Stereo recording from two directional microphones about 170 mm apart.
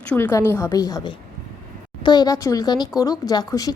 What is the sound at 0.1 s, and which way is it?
A woman's voice, 15° left (ahead or behind).